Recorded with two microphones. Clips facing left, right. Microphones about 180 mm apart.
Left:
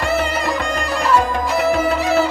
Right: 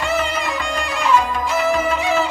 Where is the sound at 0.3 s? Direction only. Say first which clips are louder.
Left 3 dB; 35° left (ahead or behind).